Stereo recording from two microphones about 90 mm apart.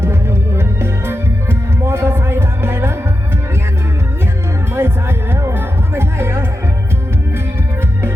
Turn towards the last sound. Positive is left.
turn(degrees=-30)  # may be behind; listen again after turning